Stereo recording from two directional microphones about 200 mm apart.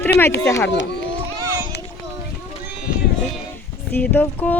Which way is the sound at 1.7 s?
55° left (ahead or behind).